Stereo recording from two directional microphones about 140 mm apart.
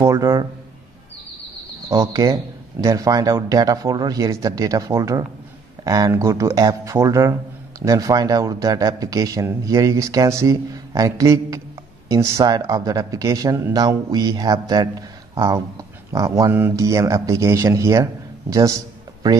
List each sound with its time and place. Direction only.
0.0 s a man's voice: 25° right (ahead or behind)
1.9 s a man's voice: 25° right (ahead or behind)
18.5 s a sound: 25° right (ahead or behind)